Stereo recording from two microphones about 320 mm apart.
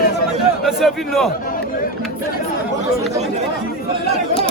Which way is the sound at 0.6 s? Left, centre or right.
Centre.